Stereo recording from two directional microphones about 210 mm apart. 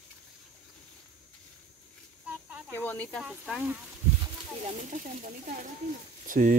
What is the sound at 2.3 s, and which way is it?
Snake, 5° right (ahead or behind).